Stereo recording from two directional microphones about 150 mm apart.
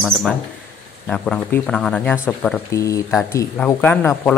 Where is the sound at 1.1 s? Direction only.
5° left (ahead or behind).